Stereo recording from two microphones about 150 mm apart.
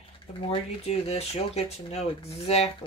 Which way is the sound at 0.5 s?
45° left (ahead or behind).